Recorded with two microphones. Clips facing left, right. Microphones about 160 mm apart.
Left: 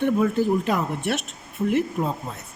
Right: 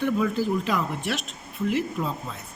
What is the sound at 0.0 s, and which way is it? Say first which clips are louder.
Speech: left 3 dB; 55° left (ahead or behind).